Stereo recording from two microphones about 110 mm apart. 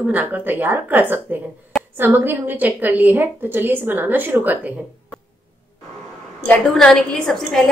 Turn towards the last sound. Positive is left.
turn(degrees=5)  # may be behind; listen again after turning